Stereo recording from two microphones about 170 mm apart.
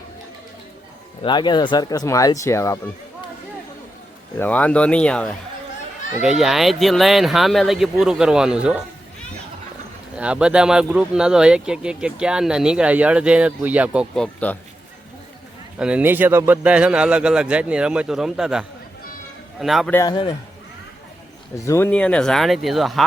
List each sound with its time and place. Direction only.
1.2 s speech: 25° left (ahead or behind)
4.4 s speech: 10° left (ahead or behind); by 8.8 s 5° right (ahead or behind)
10.2 s speech: 5° right (ahead or behind)
15.8 s speech: 10° right (ahead or behind)
19.9 s speech: 20° left (ahead or behind)
21.5 s speech: 20° left (ahead or behind); by 23.0 s centre (ahead or behind)